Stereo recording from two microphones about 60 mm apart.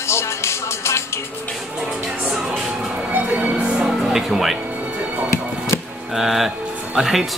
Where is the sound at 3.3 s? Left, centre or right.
Centre.